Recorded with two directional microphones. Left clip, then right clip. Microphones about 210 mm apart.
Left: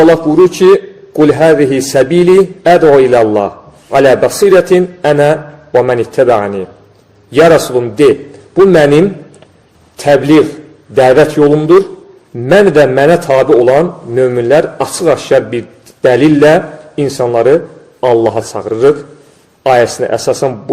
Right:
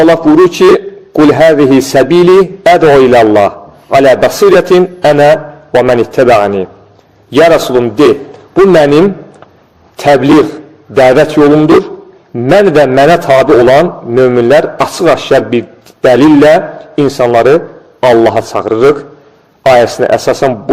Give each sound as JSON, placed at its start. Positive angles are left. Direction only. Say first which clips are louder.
{"t": 0.0, "sound": "a man's voice", "louder": "right 1 dB", "side_deg": -25}